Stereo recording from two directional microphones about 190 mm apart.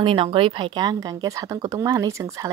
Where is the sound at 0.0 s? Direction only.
30° right (ahead or behind).